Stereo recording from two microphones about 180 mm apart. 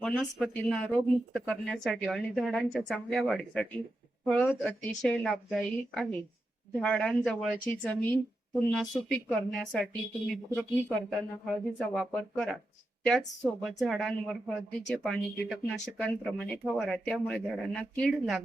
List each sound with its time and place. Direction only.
0.0 s speech: centre (ahead or behind)